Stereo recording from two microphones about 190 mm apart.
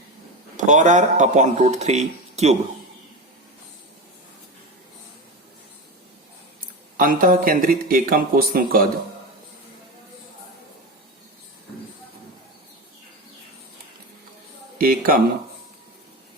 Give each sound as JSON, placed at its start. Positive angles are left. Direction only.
{"t": 0.5, "sound": "speech", "side_deg": -40}
{"t": 6.9, "sound": "speech", "side_deg": -45}
{"t": 14.8, "sound": "speech", "side_deg": -50}